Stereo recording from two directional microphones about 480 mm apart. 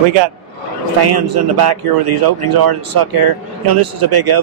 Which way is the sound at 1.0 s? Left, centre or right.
Right.